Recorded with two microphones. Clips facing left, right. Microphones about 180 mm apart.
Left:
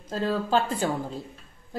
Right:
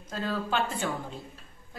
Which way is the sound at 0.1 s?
35° left (ahead or behind).